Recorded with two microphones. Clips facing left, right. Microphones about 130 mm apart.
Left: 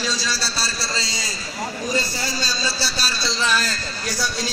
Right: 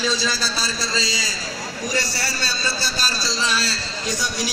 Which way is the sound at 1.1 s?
90° right.